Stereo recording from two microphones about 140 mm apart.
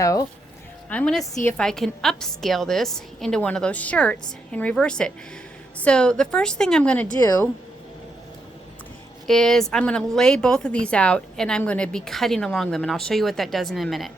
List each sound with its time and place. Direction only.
0.0 s speech: 25° left (ahead or behind)
0.9 s a woman's voice: 5° left (ahead or behind)
9.2 s a woman's voice: 5° left (ahead or behind)